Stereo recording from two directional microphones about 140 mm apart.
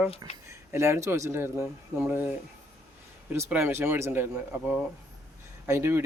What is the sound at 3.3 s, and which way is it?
Speech, 15° right (ahead or behind).